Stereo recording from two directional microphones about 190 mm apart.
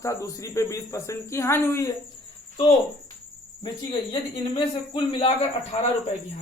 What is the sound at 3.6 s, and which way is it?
Speech, 25° left (ahead or behind).